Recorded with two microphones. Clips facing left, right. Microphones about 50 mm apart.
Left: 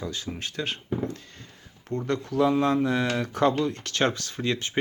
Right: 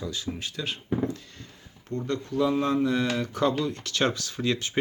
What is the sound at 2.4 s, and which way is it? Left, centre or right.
Speech, left.